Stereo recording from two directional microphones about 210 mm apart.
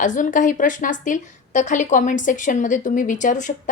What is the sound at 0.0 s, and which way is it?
A woman's voice, 35° left (ahead or behind).